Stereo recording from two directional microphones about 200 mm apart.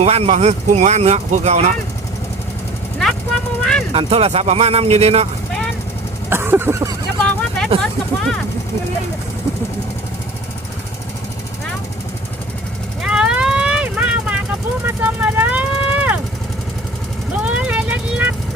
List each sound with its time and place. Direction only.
0.0 s speech: 30° right (ahead or behind)
3.6 s vehicle: 5° left (ahead or behind)
3.9 s speech: 30° right (ahead or behind)
6.3 s a sound: 10° right (ahead or behind)
7.2 s vehicle: 5° left (ahead or behind)
7.8 s speech: centre (ahead or behind)
13.0 s vehicle: 5° right (ahead or behind)
17.3 s speech: 5° right (ahead or behind)